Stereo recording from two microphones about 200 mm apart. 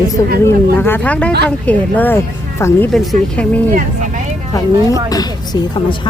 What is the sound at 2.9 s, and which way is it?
Speech, centre (ahead or behind).